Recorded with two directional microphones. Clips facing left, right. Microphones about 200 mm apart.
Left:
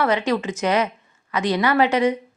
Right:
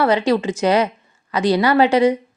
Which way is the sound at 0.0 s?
30° right (ahead or behind).